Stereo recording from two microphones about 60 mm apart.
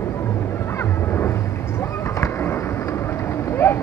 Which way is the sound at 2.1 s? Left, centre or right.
Left.